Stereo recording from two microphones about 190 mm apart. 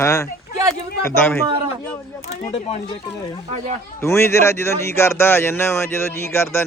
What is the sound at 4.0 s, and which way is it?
Speech, 15° left (ahead or behind).